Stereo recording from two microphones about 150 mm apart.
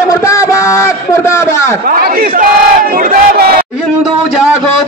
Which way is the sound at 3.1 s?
80° right.